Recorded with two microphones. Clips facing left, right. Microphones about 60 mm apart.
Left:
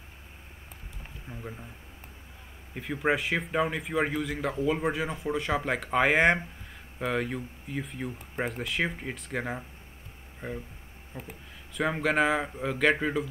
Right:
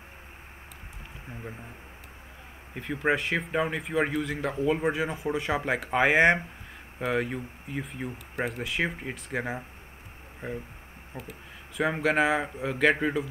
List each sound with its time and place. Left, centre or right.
1.3 s speech: centre
2.7 s speech: centre
11.1 s speech: right
11.7 s speech: centre